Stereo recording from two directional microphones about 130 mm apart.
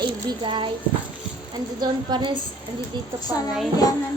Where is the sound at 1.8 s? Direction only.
35° right (ahead or behind).